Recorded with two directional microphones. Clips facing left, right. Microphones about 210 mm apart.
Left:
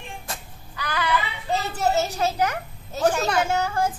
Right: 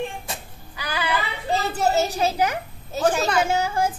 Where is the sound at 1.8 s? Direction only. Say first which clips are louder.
Right 1 dB; 10° right (ahead or behind).